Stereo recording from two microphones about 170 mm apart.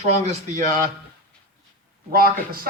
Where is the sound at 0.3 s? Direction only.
45° right (ahead or behind).